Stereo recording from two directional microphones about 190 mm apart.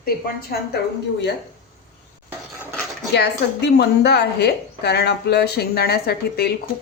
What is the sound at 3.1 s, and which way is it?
A woman's voice, 60° left (ahead or behind).